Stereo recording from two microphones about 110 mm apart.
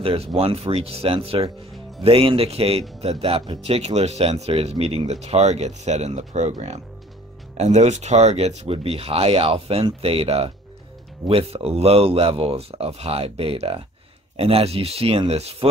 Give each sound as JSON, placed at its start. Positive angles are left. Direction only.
{"t": 0.0, "sound": "speech", "side_deg": -60}
{"t": 7.5, "sound": "speech", "side_deg": -90}